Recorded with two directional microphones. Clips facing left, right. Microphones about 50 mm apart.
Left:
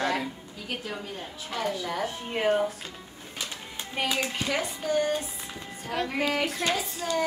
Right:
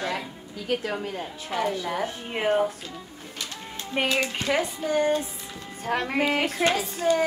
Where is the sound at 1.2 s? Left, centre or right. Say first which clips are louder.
Right 4 dB; centre.